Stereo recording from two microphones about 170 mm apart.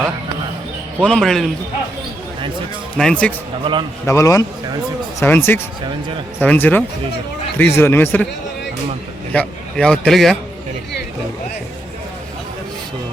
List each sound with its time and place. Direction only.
1.0 s speech: centre (ahead or behind)
3.0 s speech: 5° left (ahead or behind)
3.6 s a man's voice: 30° right (ahead or behind)
4.0 s a man's voice: 20° left (ahead or behind)
9.3 s a man's voice: 5° left (ahead or behind)